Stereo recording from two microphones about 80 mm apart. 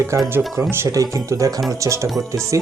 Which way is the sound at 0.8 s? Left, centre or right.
Right.